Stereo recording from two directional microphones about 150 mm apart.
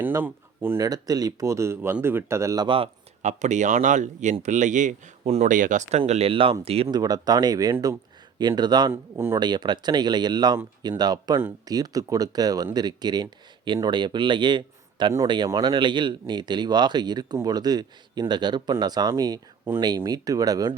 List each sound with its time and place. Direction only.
0.0 s speech: 15° right (ahead or behind)
2.6 s speech: 35° right (ahead or behind)
3.2 s speech: 50° right (ahead or behind)
6.0 s speech: 40° right (ahead or behind)
6.9 s speech: 25° right (ahead or behind)
8.9 s speech: 15° right (ahead or behind)
9.4 s speech: 30° right (ahead or behind)